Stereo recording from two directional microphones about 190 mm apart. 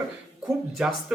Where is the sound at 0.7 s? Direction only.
Centre (ahead or behind).